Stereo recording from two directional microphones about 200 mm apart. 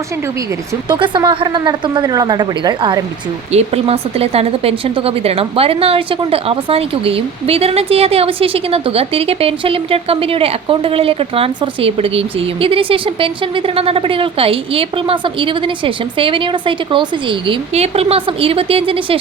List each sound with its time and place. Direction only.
0.9 s a woman's voice: 25° right (ahead or behind)